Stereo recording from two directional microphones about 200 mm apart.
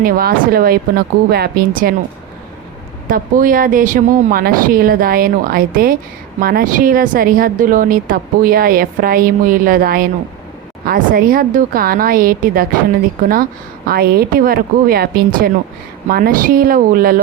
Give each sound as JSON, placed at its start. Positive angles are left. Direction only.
{"t": 0.0, "sound": "speech", "side_deg": -45}
{"t": 3.1, "sound": "speech", "side_deg": -45}